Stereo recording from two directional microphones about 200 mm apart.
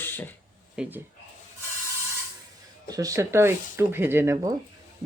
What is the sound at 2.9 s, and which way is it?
Speech, 15° right (ahead or behind).